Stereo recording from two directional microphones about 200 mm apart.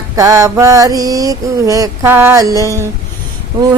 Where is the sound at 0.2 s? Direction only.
15° right (ahead or behind).